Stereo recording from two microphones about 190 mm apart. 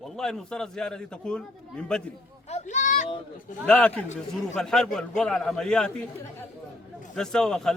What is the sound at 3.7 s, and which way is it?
A man's voice, 5° left (ahead or behind).